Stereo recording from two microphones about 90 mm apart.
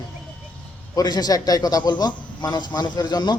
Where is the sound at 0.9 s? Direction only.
50° left (ahead or behind).